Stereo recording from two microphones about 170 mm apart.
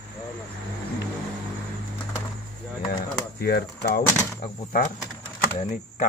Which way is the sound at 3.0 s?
65° left (ahead or behind).